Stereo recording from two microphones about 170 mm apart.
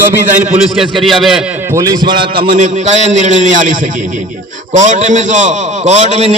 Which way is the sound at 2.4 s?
60° right (ahead or behind).